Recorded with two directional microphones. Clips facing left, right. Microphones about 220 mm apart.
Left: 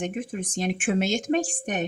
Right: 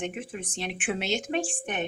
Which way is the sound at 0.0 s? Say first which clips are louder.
Left 4 dB; 45° left (ahead or behind).